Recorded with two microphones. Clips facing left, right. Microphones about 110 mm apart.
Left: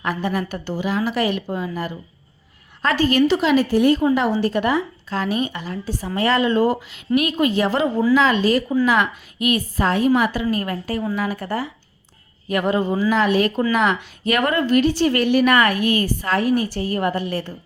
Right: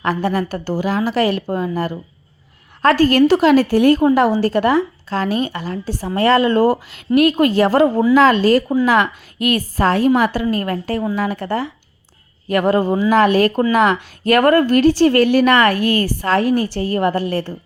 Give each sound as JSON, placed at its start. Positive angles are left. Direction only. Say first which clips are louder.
{"t": 0.0, "sound": "speech", "louder": "right 4 dB", "side_deg": -35}
{"t": 2.9, "sound": "speech", "louder": "right 4 dB", "side_deg": -40}
{"t": 3.8, "sound": "a woman's voice", "louder": "right 4 dB", "side_deg": -50}
{"t": 4.4, "sound": "a woman's voice", "louder": "right 4 dB", "side_deg": -35}
{"t": 9.7, "sound": "speech", "louder": "right 4 dB", "side_deg": -35}
{"t": 12.5, "sound": "speech", "louder": "right 5 dB", "side_deg": -35}
{"t": 13.1, "sound": "speech", "louder": "right 5 dB", "side_deg": -50}